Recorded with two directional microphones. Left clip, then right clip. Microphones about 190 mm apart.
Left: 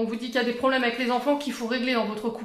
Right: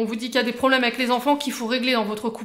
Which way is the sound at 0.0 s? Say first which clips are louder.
Right 3 dB; 40° right (ahead or behind).